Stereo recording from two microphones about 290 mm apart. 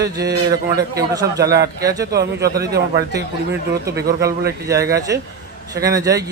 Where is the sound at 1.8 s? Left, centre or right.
Centre.